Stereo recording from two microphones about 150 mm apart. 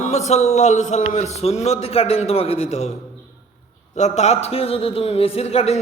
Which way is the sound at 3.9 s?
50° left (ahead or behind).